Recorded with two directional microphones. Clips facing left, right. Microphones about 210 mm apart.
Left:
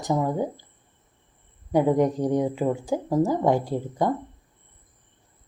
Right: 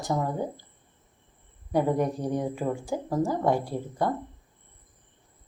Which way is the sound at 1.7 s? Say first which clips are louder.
Left 4 dB; 15° left (ahead or behind).